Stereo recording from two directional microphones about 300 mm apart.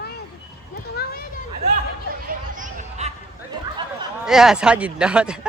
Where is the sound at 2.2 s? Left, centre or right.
Right.